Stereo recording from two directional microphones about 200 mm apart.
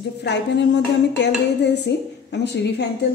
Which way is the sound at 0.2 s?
60° left (ahead or behind).